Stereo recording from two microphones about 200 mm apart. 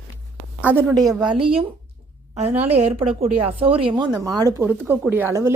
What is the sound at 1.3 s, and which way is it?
Speech, 25° right (ahead or behind).